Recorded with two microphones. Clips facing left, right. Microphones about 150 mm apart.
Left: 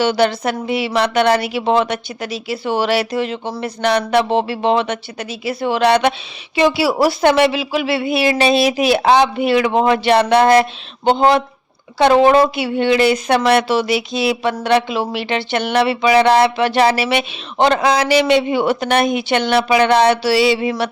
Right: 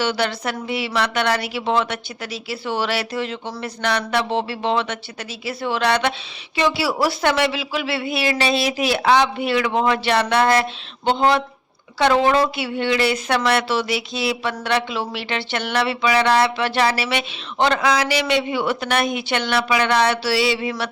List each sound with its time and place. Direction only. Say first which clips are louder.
0.0 s speech: left 7 dB; 20° left (ahead or behind)